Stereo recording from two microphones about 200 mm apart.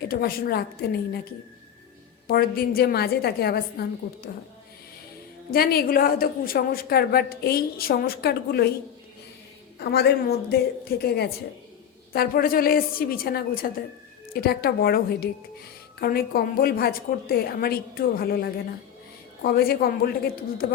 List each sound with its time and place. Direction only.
0.1 s a woman's voice: 50° left (ahead or behind)
2.2 s a woman's voice: 50° left (ahead or behind)
5.5 s a woman's voice: 50° left (ahead or behind)
9.7 s a woman's voice: 55° left (ahead or behind)